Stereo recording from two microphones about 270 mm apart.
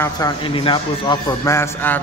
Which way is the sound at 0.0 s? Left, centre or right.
Centre.